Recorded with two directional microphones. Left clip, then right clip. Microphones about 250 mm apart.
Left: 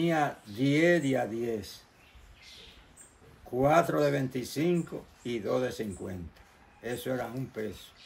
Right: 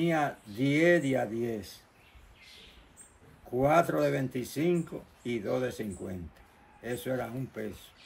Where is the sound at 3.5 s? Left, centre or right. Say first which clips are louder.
Left 1 dB; centre.